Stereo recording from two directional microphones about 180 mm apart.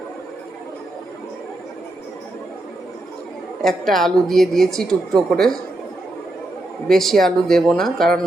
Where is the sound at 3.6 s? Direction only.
Centre (ahead or behind).